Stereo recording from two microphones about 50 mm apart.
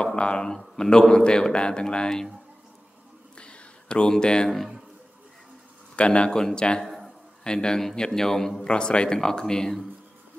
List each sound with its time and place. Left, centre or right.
0.0 s a man's voice: centre
3.3 s a sound: left
5.9 s a man's voice: left
8.6 s a man's voice: centre